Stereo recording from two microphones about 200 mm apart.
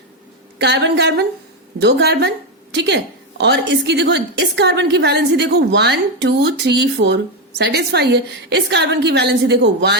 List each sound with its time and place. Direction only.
0.6 s a woman's voice: 60° right (ahead or behind)